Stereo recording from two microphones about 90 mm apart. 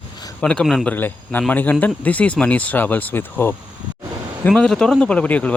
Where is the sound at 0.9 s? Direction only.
20° left (ahead or behind).